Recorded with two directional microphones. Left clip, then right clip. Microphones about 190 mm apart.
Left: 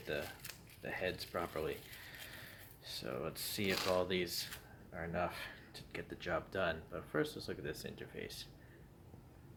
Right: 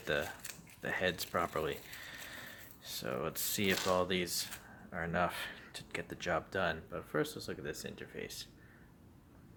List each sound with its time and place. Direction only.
0.1 s speech: 30° right (ahead or behind)
2.8 s speech: 15° right (ahead or behind)